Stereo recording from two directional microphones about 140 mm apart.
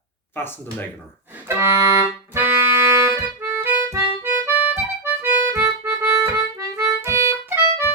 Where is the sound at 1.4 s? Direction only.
20° right (ahead or behind).